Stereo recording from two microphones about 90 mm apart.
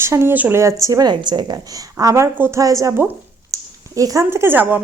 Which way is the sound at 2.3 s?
25° right (ahead or behind).